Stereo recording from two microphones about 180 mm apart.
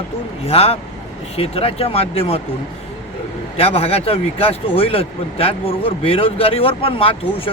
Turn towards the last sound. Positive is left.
turn(degrees=30)  # may be behind; listen again after turning